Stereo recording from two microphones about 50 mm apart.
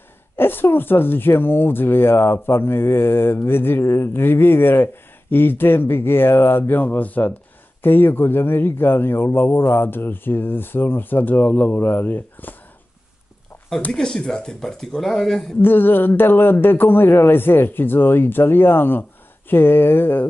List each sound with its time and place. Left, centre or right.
0.4 s a man's voice: left
13.9 s speech: centre
15.6 s a man's voice: left